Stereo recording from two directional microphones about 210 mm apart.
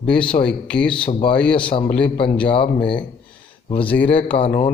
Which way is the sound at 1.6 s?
25° left (ahead or behind).